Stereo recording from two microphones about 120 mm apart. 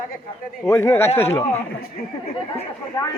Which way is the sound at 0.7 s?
25° left (ahead or behind).